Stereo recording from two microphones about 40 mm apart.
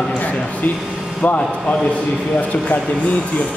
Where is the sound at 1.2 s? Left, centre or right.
Left.